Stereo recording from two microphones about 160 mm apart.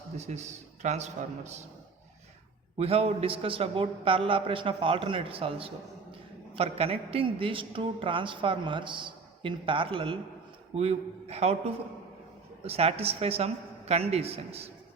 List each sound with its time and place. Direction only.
0.2 s a man's voice: 45° right (ahead or behind)
2.7 s a man's voice: 40° right (ahead or behind)